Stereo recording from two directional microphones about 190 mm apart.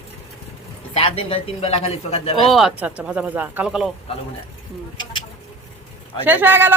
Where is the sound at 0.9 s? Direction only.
30° left (ahead or behind).